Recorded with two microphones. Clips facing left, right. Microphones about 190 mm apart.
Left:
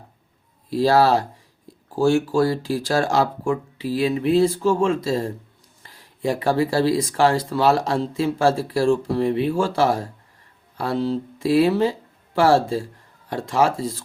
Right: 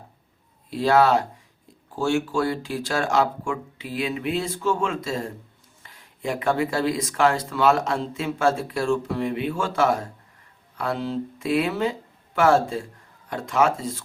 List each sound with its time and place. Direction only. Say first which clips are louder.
0.7 s speech: left 2 dB; 35° left (ahead or behind)